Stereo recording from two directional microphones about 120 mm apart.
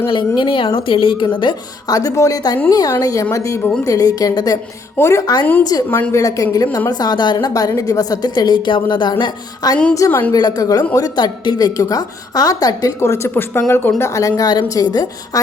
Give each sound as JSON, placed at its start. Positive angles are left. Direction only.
{"t": 0.1, "sound": "speech", "side_deg": 40}
{"t": 1.9, "sound": "a woman's voice", "side_deg": 30}
{"t": 5.2, "sound": "a woman's voice", "side_deg": 35}
{"t": 5.9, "sound": "a woman's voice", "side_deg": 20}
{"t": 9.9, "sound": "a woman's voice", "side_deg": 25}
{"t": 10.3, "sound": "a woman's voice", "side_deg": 30}